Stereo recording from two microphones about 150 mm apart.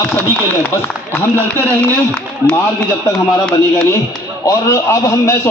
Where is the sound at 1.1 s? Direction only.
15° left (ahead or behind).